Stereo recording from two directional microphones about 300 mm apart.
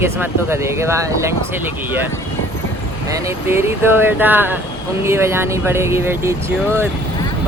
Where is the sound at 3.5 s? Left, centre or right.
Centre.